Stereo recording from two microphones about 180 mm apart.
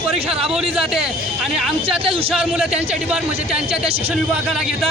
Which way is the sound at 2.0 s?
30° right (ahead or behind).